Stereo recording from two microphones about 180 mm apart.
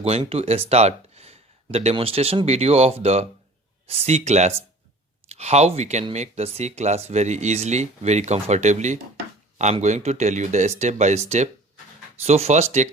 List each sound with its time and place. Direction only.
0.0 s speech: 35° right (ahead or behind)